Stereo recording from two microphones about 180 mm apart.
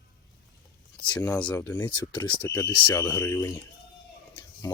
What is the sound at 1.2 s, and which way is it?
Speech, 5° left (ahead or behind).